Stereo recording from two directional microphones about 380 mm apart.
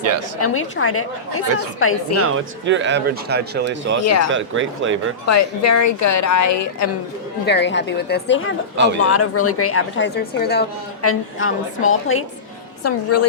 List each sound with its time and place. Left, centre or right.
0.3 s speech: left
2.1 s speech: right
4.0 s a woman's voice: left
4.3 s speech: right
5.2 s a woman's voice: left
7.4 s a woman's voice: left
8.7 s speech: right
9.0 s speech: left